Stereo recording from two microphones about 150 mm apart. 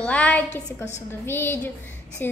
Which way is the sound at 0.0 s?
10° left (ahead or behind).